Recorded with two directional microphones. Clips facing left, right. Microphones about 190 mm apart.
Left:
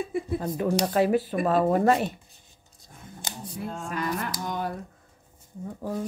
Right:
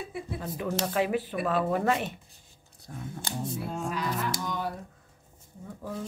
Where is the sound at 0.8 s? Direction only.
40° left (ahead or behind).